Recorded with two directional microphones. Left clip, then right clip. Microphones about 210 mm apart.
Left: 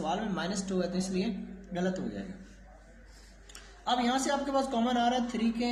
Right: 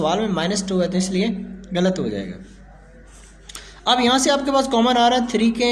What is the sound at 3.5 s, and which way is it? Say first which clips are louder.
Speech: right 12 dB; 45° right (ahead or behind).